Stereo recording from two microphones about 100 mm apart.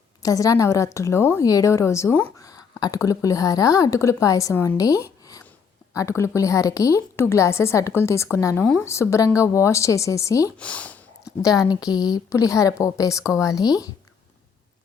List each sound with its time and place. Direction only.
0.2 s speech: 35° left (ahead or behind)
4.8 s a sound: 35° left (ahead or behind)
5.9 s a woman's voice: 30° left (ahead or behind)
8.5 s speech: 10° left (ahead or behind)
8.8 s speech: 30° left (ahead or behind)
10.6 s speech: 15° left (ahead or behind)
11.4 s speech: 35° left (ahead or behind)